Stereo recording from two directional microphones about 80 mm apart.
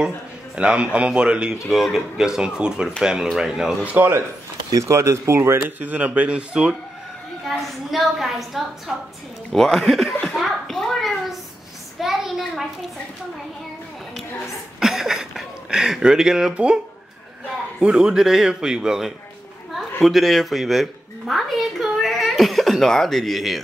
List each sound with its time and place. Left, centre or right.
0.6 s speech: centre
3.8 s speech: centre
4.6 s speech: right
5.8 s speech: centre
7.4 s a woman's voice: centre
12.0 s a sound: centre
14.1 s a woman's voice: centre